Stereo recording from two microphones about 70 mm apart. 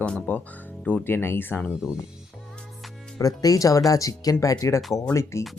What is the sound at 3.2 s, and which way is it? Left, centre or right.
Speech, left.